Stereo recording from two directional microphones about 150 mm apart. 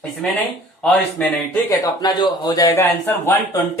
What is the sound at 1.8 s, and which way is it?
Speech, 25° left (ahead or behind).